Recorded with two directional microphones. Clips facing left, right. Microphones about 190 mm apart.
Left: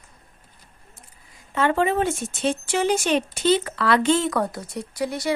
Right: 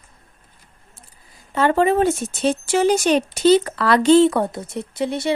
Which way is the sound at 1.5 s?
35° right (ahead or behind).